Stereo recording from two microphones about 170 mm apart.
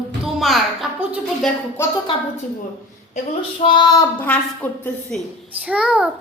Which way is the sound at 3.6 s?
30° left (ahead or behind).